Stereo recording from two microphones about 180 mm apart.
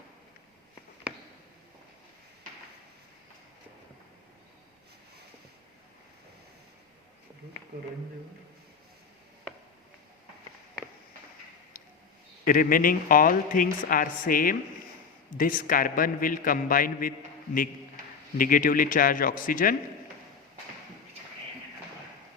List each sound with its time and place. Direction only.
12.5 s a man's voice: 50° left (ahead or behind)